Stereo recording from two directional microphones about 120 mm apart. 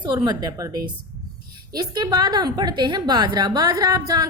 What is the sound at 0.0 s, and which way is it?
A woman's voice, 35° right (ahead or behind).